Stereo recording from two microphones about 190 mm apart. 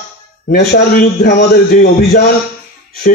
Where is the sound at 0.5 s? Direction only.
55° left (ahead or behind).